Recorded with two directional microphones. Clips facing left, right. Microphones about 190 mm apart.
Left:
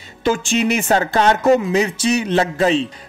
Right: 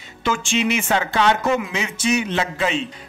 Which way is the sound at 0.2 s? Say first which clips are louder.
Left 4 dB; 40° left (ahead or behind).